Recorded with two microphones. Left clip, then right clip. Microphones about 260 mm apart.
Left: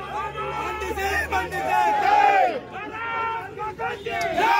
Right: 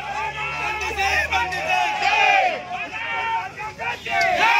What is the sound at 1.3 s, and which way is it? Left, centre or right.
Crowd, centre.